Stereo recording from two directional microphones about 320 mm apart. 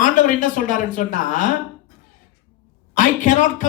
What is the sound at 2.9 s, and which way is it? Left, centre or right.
Speech, left.